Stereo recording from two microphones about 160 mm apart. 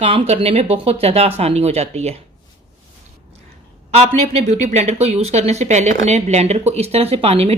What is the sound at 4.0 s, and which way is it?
Speech, 45° right (ahead or behind).